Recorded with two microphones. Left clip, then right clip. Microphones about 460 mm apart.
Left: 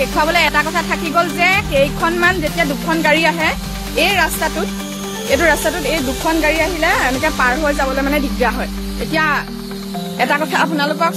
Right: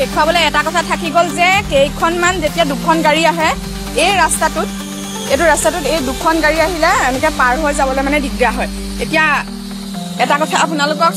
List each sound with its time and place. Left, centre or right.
0.2 s speech: left